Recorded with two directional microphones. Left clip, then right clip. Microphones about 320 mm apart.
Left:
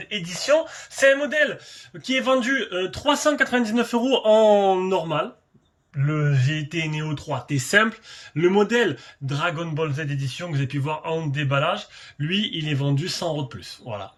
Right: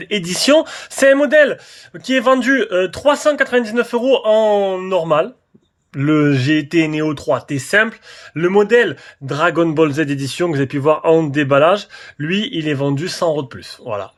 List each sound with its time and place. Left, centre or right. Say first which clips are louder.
0.0 s speech: right 10 dB; centre